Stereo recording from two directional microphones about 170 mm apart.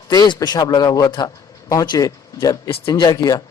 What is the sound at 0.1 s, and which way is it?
A man's voice, 20° left (ahead or behind).